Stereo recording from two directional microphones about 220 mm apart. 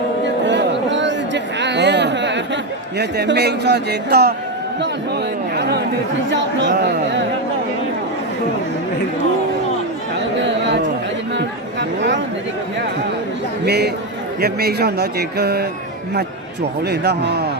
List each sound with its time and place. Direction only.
0.4 s chatter: 55° right (ahead or behind)
3.0 s speech: 50° right (ahead or behind)
5.5 s chatter: 50° right (ahead or behind)
6.3 s speech: 55° right (ahead or behind)
10.4 s a sound: 50° right (ahead or behind)
13.7 s speech: 50° right (ahead or behind)
16.8 s speech: 50° right (ahead or behind)